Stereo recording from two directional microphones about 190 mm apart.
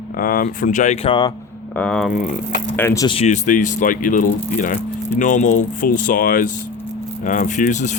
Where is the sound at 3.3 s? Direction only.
40° left (ahead or behind).